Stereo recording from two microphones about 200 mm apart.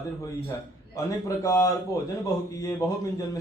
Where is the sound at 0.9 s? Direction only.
15° left (ahead or behind).